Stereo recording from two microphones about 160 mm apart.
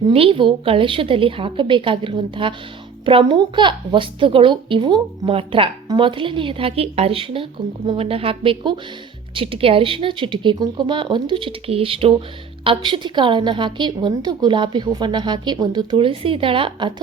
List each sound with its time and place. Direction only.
0.1 s a woman's voice: 35° right (ahead or behind)